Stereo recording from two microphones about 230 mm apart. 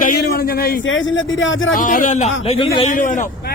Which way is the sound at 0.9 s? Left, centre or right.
Left.